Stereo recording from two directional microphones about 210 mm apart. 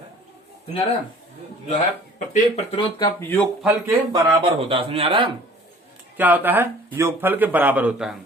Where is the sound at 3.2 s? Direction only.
10° left (ahead or behind).